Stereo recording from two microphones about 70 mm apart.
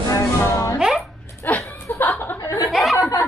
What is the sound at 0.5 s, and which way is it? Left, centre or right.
Speech, left.